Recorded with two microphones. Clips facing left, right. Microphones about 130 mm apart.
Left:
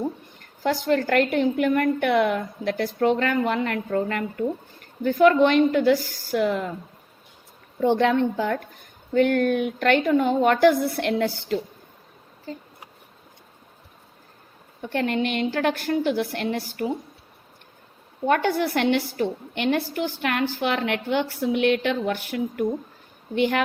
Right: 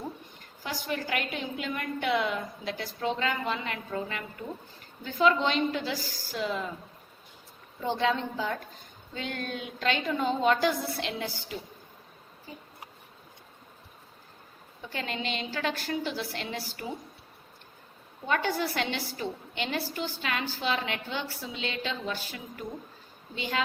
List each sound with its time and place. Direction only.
0.6 s a woman's voice: 65° left (ahead or behind)
7.8 s a woman's voice: 60° left (ahead or behind)
14.8 s a woman's voice: 60° left (ahead or behind)
18.3 s a woman's voice: 60° left (ahead or behind)